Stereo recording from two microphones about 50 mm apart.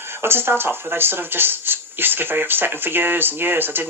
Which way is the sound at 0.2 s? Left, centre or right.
Right.